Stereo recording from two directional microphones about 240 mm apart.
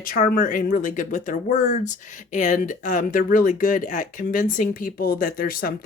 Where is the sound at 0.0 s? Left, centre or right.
Left.